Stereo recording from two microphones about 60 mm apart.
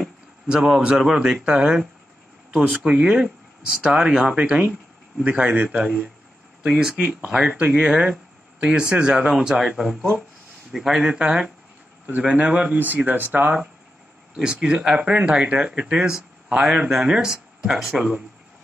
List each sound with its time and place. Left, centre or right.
0.5 s speech: centre
6.7 s speech: centre; by 13.6 s right
14.3 s speech: centre